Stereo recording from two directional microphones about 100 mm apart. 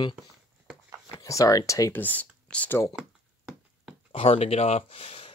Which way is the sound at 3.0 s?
5° right (ahead or behind).